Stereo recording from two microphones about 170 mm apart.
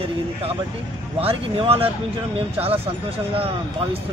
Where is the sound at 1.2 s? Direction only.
35° right (ahead or behind).